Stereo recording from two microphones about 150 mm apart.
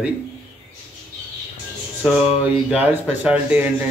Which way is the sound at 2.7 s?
10° right (ahead or behind).